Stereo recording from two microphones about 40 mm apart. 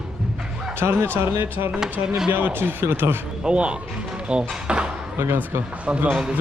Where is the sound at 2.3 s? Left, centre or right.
Right.